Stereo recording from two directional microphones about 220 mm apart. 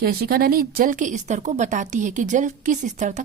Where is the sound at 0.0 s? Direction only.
45° right (ahead or behind).